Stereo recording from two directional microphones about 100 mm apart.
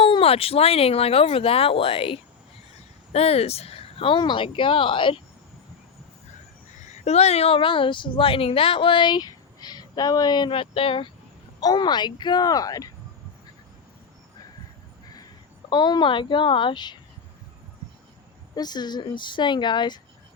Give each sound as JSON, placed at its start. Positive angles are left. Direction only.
{"t": 0.0, "sound": "speech", "side_deg": 70}
{"t": 3.1, "sound": "speech", "side_deg": 90}
{"t": 7.0, "sound": "speech", "side_deg": 90}
{"t": 11.6, "sound": "speech", "side_deg": 45}
{"t": 15.7, "sound": "speech", "side_deg": 45}
{"t": 18.5, "sound": "speech", "side_deg": 45}